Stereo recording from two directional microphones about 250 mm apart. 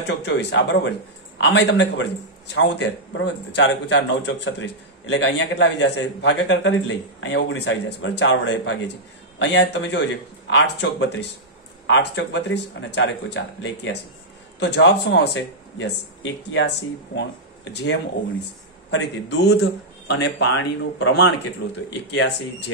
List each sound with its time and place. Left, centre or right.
0.0 s a man's voice: left
18.9 s a man's voice: left